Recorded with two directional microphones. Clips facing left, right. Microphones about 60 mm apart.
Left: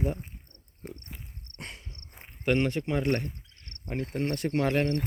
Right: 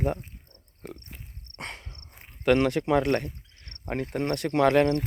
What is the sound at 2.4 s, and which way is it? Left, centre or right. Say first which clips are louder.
Speech: right 4 dB; right.